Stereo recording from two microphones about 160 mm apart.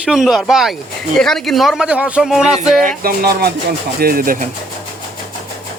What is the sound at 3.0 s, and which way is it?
Speech, 75° right (ahead or behind).